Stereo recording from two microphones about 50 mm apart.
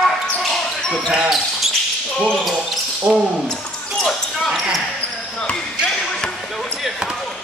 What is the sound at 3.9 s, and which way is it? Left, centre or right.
Basketball bounce, centre.